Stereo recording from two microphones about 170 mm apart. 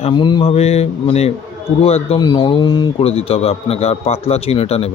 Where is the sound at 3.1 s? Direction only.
35° left (ahead or behind).